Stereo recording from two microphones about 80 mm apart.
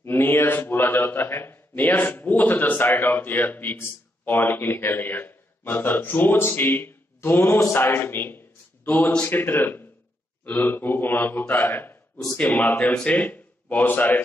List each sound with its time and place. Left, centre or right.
0.0 s a man's voice: left